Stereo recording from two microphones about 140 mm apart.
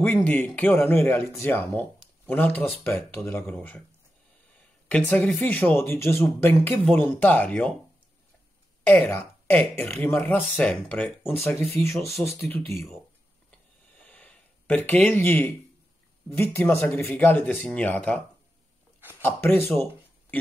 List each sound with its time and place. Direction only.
0.0 s speech: 10° left (ahead or behind)
4.8 s speech: 10° left (ahead or behind)
8.8 s speech: 10° left (ahead or behind)
13.9 s a sound: 10° left (ahead or behind)
16.3 s speech: 15° left (ahead or behind)
18.9 s a sound: 15° right (ahead or behind)
19.2 s speech: 15° left (ahead or behind)